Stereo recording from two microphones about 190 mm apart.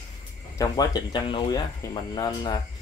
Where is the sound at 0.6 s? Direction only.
20° left (ahead or behind).